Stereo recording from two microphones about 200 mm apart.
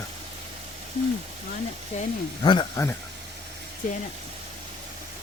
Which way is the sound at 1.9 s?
35° left (ahead or behind).